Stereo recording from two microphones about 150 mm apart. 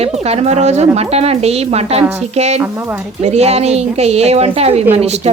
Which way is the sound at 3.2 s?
45° right (ahead or behind).